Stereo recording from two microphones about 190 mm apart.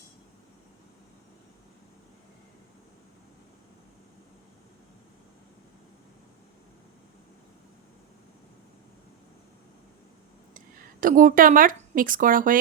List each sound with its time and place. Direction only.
11.0 s speech: 45° right (ahead or behind)